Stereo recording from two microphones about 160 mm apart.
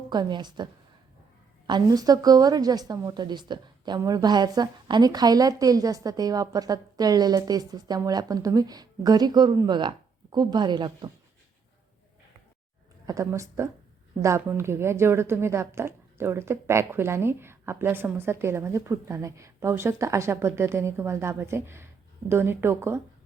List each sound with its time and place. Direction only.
0.1 s a woman's voice: 25° right (ahead or behind)
13.1 s a woman's voice: 20° right (ahead or behind)